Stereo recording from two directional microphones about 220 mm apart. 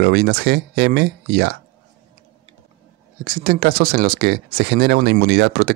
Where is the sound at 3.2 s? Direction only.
40° right (ahead or behind).